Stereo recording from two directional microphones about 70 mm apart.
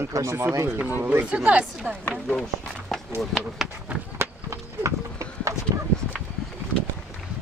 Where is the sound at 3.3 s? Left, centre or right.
Centre.